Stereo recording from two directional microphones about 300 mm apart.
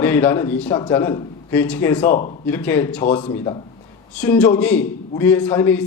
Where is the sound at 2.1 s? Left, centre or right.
Left.